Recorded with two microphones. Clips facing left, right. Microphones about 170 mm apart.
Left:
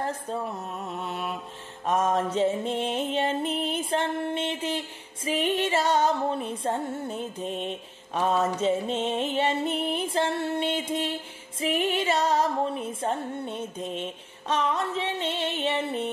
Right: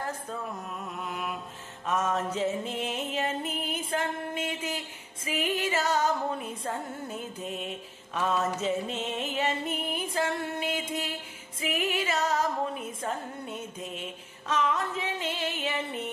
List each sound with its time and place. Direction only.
1.0 s mantra: 30° left (ahead or behind)
1.9 s music: 35° left (ahead or behind)